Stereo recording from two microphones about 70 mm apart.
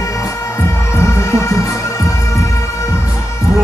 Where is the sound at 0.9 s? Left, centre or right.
Left.